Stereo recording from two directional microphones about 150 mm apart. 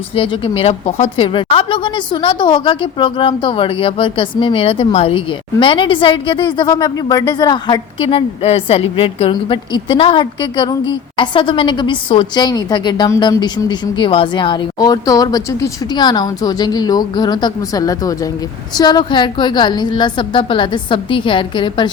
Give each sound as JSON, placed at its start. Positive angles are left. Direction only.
{"t": 0.2, "sound": "a woman's voice", "side_deg": 40}
{"t": 1.2, "sound": "a woman's voice", "side_deg": 35}